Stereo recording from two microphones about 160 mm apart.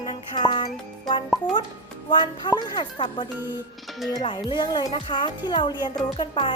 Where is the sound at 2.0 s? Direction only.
30° left (ahead or behind).